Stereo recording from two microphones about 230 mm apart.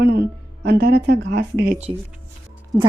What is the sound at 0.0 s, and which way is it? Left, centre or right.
A woman's voice, right.